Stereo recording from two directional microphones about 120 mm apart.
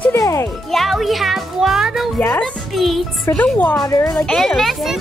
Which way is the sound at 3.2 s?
15° left (ahead or behind).